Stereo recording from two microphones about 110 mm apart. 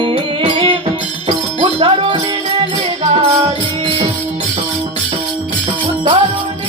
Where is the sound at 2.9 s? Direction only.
70° right (ahead or behind); by 6.1 s 50° right (ahead or behind).